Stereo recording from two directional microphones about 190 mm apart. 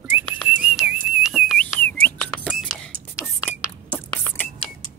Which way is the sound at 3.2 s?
15° left (ahead or behind).